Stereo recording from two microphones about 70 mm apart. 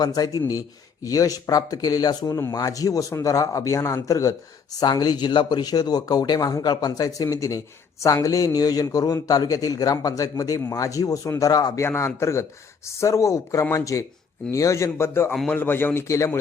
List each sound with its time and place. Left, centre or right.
0.0 s speech: left
4.8 s speech: left
7.3 s speech: left
11.8 s a man's voice: left
16.0 s speech: left